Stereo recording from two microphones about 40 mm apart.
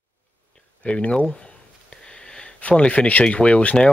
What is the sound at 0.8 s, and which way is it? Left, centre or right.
Speech, left.